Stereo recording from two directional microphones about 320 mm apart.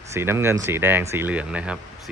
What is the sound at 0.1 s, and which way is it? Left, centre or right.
Speech, centre.